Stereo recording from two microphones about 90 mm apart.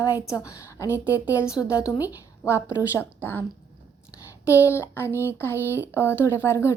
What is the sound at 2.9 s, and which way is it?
Speech, 25° left (ahead or behind).